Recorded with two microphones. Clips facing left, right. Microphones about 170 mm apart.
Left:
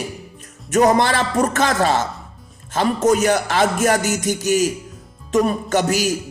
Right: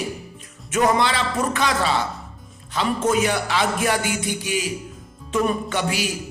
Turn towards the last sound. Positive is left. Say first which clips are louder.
# left 6 dB
turn(degrees=40)  # may be behind; listen again after turning